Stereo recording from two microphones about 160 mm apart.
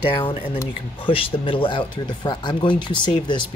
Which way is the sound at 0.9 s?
30° left (ahead or behind).